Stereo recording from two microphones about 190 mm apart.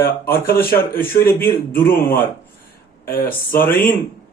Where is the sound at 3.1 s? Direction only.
50° left (ahead or behind).